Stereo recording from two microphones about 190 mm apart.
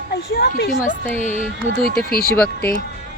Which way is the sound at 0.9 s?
40° left (ahead or behind).